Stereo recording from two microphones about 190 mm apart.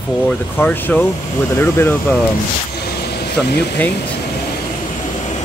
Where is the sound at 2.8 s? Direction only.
55° left (ahead or behind).